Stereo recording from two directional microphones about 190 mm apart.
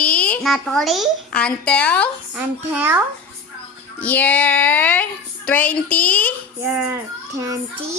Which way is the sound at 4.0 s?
10° left (ahead or behind).